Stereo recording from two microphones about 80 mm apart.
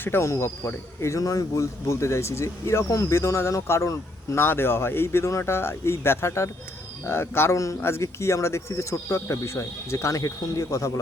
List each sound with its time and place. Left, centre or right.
0.0 s speech: left